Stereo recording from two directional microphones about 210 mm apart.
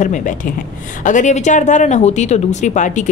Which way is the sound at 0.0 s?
35° left (ahead or behind).